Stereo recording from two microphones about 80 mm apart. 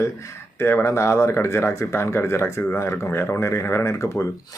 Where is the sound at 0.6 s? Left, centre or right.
Left.